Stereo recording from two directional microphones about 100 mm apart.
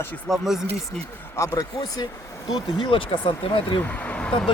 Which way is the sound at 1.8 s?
45° left (ahead or behind).